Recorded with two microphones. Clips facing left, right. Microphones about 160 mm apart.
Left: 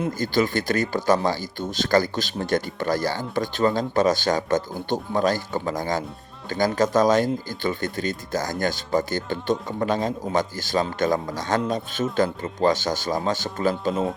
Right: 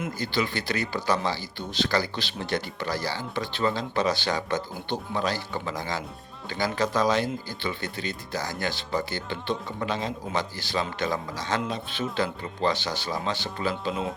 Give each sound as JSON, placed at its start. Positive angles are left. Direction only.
{"t": 0.0, "sound": "speech", "side_deg": 45}